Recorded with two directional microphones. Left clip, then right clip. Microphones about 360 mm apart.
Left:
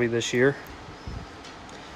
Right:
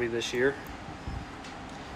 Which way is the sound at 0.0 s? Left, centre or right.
Left.